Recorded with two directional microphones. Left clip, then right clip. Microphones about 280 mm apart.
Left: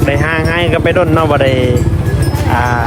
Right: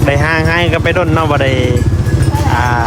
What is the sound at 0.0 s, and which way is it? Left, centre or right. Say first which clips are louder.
Speech: right 1 dB; centre.